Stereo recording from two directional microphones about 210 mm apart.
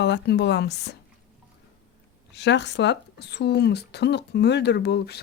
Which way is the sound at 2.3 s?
55° left (ahead or behind).